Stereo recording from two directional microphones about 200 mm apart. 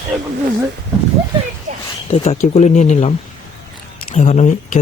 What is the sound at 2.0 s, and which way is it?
Speech, 30° left (ahead or behind).